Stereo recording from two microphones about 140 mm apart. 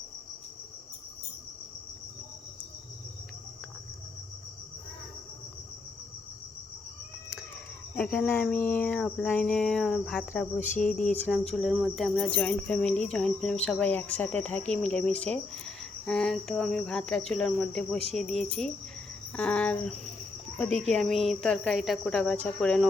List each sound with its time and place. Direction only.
7.9 s speech: 10° left (ahead or behind)
10.8 s cricket: 5° left (ahead or behind)
14.9 s speech: 5° left (ahead or behind)
19.4 s cricket: 10° left (ahead or behind)
20.6 s speech: 5° left (ahead or behind)